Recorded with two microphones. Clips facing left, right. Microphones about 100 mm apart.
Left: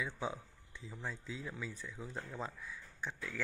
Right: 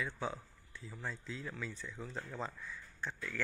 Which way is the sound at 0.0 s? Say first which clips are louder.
Even; 10° left (ahead or behind).